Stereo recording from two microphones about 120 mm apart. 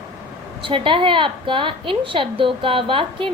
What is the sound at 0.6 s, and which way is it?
A woman's voice, 45° right (ahead or behind).